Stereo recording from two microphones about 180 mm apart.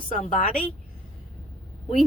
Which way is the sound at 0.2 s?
45° left (ahead or behind).